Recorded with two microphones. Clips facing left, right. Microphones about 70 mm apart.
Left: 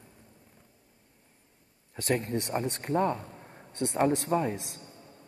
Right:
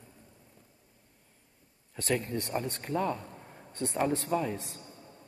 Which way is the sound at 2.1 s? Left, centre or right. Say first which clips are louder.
Left 1 dB; left.